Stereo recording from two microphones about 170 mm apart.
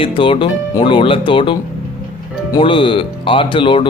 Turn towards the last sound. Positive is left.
turn(degrees=30)  # may be behind; listen again after turning